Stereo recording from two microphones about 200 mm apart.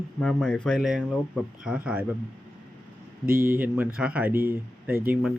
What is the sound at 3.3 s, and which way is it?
Speech, 45° right (ahead or behind).